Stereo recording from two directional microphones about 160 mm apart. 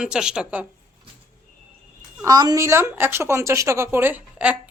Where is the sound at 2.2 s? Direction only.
25° right (ahead or behind); by 4.6 s 10° right (ahead or behind).